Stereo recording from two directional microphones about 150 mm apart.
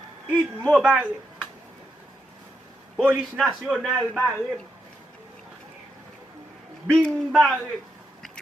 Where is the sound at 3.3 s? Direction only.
Centre (ahead or behind).